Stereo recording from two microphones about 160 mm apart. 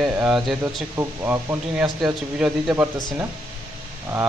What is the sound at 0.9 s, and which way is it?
Speech, 15° right (ahead or behind).